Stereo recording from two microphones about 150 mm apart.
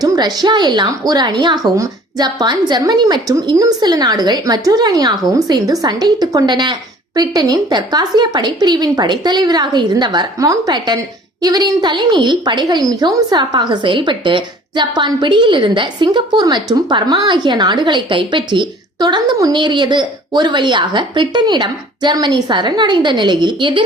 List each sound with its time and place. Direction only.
0.0 s a woman's voice: 25° right (ahead or behind)